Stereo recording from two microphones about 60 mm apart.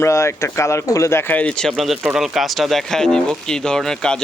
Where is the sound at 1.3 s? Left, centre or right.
Left.